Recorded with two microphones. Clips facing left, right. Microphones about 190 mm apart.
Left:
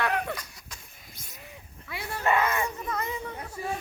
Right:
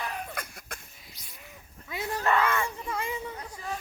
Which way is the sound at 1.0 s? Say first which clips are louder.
Left 3 dB; 50° left (ahead or behind).